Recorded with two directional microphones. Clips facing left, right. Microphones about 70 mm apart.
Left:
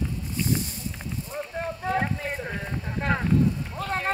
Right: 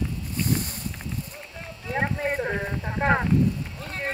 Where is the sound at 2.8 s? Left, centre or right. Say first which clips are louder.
Right 4 dB; right.